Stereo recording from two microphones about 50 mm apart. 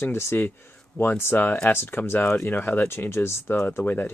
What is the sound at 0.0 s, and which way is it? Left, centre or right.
Speech, left.